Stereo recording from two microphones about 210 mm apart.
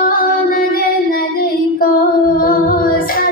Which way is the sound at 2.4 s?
45° left (ahead or behind).